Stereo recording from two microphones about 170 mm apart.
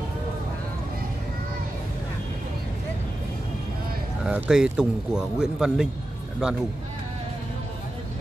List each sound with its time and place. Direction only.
4.2 s speech: 5° right (ahead or behind)